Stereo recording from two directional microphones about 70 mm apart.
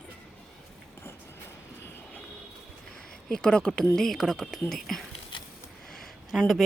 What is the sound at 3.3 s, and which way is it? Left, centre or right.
A woman's voice, centre.